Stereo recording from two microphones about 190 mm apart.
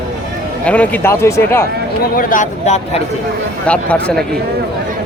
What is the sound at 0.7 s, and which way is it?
Speech, 10° left (ahead or behind).